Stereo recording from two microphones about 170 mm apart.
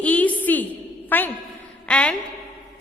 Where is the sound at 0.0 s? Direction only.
10° left (ahead or behind).